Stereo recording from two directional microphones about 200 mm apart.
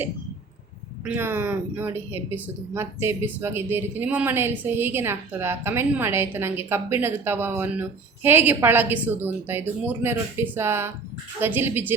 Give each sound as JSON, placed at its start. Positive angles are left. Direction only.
{"t": 1.0, "sound": "a woman's voice", "side_deg": -10}